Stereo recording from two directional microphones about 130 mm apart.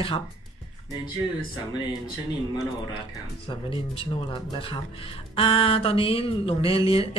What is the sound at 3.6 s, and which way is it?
Speech, 40° left (ahead or behind).